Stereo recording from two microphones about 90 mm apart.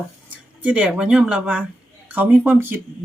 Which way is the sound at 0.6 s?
15° right (ahead or behind).